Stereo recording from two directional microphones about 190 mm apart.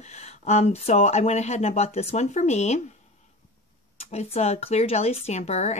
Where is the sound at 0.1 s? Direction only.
35° left (ahead or behind).